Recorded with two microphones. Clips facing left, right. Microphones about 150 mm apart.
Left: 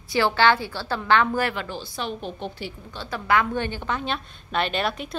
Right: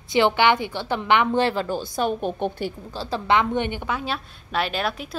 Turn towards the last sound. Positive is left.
turn(degrees=0)  # may be behind; listen again after turning